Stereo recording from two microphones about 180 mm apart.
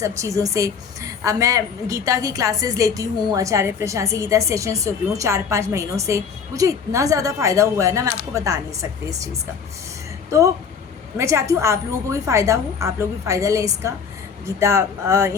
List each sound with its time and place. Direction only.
0.2 s a woman's voice: 15° right (ahead or behind)
11.2 s a woman's voice: 15° right (ahead or behind)